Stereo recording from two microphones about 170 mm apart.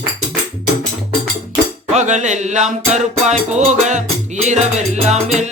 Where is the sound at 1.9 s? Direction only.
45° right (ahead or behind).